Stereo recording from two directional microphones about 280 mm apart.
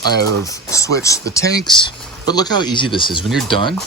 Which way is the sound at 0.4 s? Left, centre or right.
Centre.